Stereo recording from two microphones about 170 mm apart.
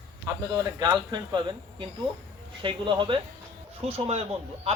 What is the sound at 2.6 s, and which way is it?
Speech, 30° right (ahead or behind).